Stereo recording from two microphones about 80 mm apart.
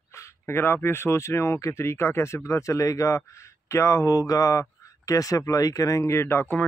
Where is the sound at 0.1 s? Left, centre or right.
Left.